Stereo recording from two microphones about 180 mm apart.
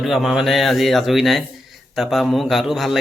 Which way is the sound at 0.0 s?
Centre (ahead or behind).